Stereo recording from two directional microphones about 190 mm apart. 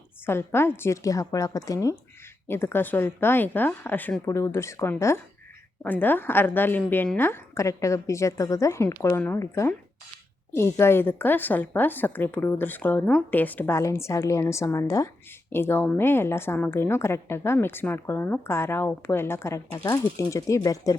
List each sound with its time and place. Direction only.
0.3 s a woman's voice: 10° left (ahead or behind)